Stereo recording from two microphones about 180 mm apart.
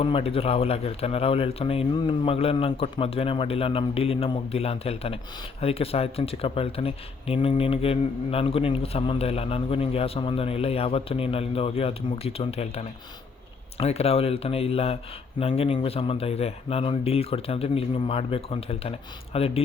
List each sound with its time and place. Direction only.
0.0 s speech: 30° left (ahead or behind)